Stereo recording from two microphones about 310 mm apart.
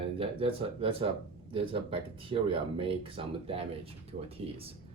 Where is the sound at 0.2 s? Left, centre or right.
Centre.